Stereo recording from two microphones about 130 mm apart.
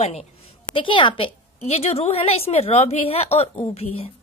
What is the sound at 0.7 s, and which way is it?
A woman's voice, 40° left (ahead or behind).